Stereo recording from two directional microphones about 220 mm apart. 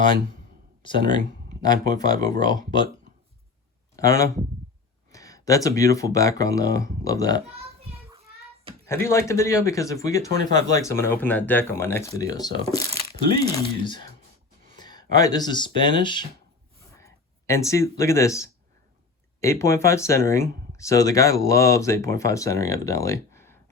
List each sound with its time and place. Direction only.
0.8 s speech: 20° left (ahead or behind)
3.9 s speech: 15° left (ahead or behind)
9.0 s speech: 15° left (ahead or behind)